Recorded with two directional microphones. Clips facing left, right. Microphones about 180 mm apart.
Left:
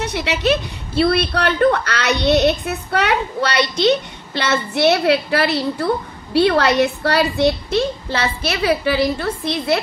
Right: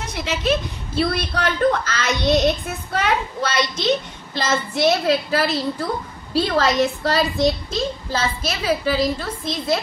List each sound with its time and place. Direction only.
0.0 s a woman's voice: 70° left (ahead or behind)